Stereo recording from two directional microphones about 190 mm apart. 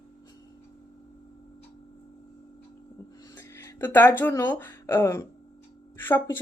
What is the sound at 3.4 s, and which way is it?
Music, 15° left (ahead or behind).